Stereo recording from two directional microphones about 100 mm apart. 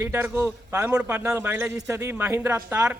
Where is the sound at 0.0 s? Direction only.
25° right (ahead or behind).